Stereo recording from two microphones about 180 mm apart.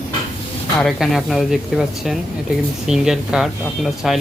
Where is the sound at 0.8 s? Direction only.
Centre (ahead or behind).